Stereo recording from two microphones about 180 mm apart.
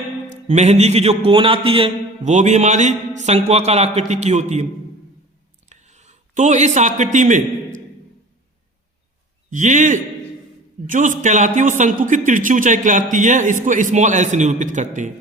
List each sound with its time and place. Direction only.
0.3 s a man's voice: 40° right (ahead or behind)
5.6 s a sound: 40° right (ahead or behind)
9.5 s speech: 45° right (ahead or behind)